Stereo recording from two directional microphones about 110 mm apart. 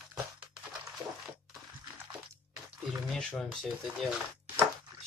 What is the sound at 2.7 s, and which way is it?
Speech, centre (ahead or behind).